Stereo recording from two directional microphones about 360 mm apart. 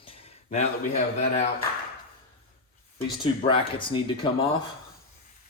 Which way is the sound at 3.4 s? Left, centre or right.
Centre.